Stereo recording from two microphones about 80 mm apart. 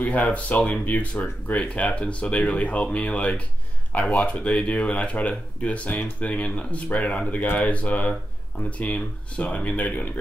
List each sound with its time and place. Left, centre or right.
0.0 s speech: centre